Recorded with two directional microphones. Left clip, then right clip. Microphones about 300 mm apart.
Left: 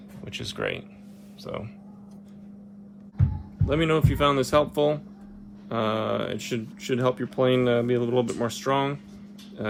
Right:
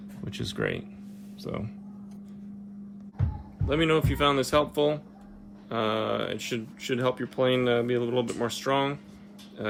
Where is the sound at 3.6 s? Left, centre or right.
Centre.